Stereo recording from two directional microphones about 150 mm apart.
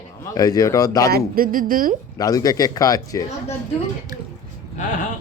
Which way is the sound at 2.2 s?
25° left (ahead or behind).